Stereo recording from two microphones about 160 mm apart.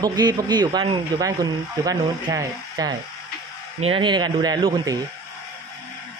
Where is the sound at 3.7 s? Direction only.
35° right (ahead or behind).